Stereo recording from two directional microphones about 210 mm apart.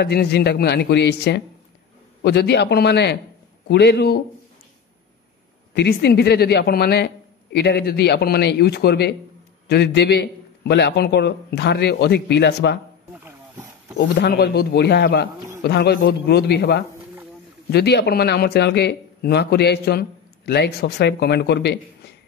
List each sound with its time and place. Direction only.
0.0 s speech: 50° left (ahead or behind)
5.8 s speech: 50° left (ahead or behind)
13.2 s wild animals: 10° right (ahead or behind)
13.9 s speech: 50° left (ahead or behind)